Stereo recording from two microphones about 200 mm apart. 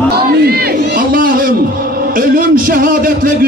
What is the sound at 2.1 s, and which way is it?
A man's voice, 45° right (ahead or behind).